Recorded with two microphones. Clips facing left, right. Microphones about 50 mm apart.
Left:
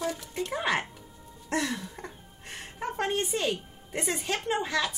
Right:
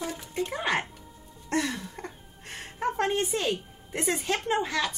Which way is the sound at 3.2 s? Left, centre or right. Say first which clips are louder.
Right 1 dB; centre.